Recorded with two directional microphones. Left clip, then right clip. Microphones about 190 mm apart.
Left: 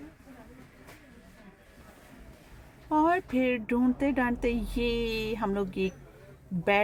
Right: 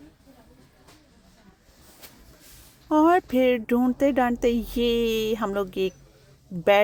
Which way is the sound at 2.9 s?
35° right (ahead or behind).